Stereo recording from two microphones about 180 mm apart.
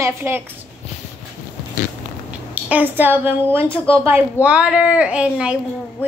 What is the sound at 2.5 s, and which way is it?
Speech, 10° right (ahead or behind).